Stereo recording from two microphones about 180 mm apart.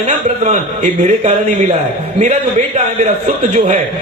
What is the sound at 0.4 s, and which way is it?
Speech, 40° right (ahead or behind).